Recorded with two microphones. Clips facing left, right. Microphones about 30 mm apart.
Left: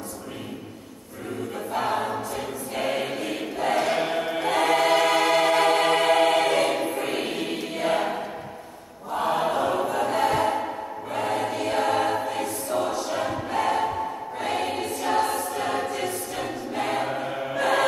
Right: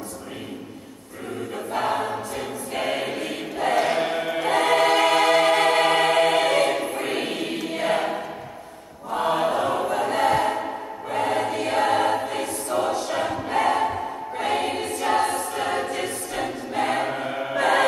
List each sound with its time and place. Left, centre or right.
1.7 s choir: centre
3.9 s music: centre
4.4 s choir: centre
4.9 s music: centre
6.2 s choir: centre
11.8 s choir: right
12.2 s choir: centre
13.7 s a sound: right
14.8 s choir: centre
16.4 s choir: right
17.1 s chant: centre